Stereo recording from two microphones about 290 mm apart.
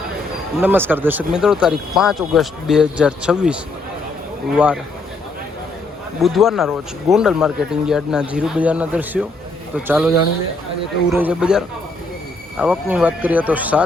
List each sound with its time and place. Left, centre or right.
0.6 s speech: centre
6.2 s speech: centre
11.1 s speech: centre